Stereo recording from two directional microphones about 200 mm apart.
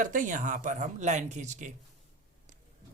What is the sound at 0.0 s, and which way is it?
Speech, 40° right (ahead or behind).